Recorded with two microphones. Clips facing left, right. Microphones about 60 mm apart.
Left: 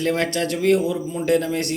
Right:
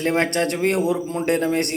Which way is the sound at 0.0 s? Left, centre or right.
Right.